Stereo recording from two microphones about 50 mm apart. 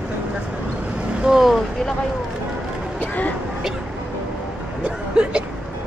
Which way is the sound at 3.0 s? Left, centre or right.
Left.